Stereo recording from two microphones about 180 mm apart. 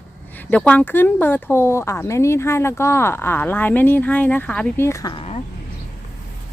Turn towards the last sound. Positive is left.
turn(degrees=35)  # may be behind; listen again after turning